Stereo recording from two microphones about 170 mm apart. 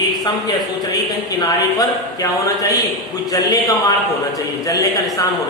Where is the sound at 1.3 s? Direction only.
20° left (ahead or behind).